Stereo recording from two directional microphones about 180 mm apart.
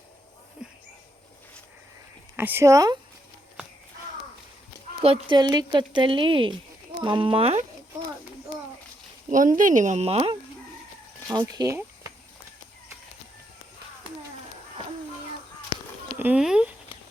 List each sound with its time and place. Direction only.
2.3 s speech: 10° right (ahead or behind)
5.0 s speech: 30° right (ahead or behind)
9.6 s speech: 45° right (ahead or behind)
11.3 s speech: 20° right (ahead or behind)
16.1 s a sound: 10° right (ahead or behind)